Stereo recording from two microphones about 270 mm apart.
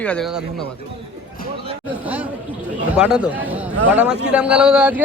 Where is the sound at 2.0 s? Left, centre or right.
Centre.